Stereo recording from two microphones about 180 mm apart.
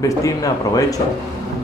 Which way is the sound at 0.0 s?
20° left (ahead or behind).